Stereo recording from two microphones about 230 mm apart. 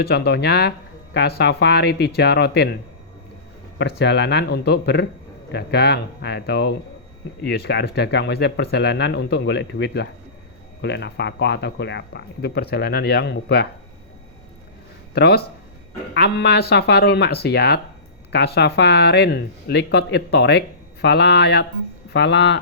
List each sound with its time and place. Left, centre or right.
0.0 s speech: left
3.8 s speech: left
15.1 s speech: left